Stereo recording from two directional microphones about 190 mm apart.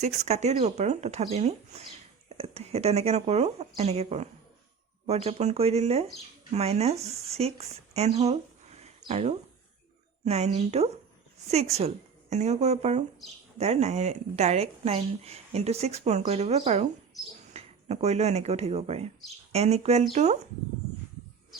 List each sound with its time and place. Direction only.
0.0 s speech: 35° right (ahead or behind)
12.3 s speech: 35° right (ahead or behind)